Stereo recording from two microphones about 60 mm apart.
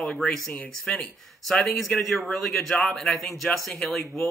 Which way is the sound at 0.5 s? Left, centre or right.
Centre.